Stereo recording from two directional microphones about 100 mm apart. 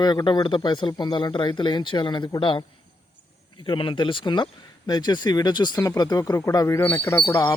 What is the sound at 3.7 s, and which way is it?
Speech, 55° left (ahead or behind).